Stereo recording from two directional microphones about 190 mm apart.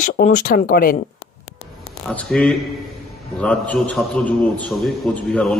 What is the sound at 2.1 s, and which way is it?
A man's voice, 5° left (ahead or behind).